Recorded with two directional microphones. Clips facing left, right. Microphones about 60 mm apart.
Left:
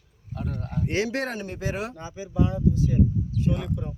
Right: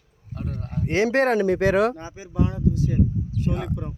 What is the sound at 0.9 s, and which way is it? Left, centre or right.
Speech, right.